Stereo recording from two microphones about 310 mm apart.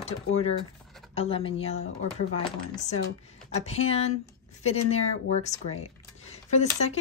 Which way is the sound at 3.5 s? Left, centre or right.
Centre.